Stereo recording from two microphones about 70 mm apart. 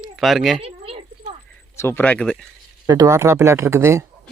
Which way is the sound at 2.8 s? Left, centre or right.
Right.